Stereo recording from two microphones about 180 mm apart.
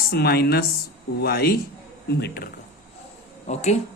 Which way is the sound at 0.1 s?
60° left (ahead or behind).